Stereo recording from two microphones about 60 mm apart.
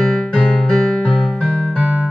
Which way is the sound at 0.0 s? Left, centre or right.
Centre.